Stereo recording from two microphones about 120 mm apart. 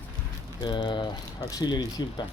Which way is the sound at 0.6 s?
40° left (ahead or behind).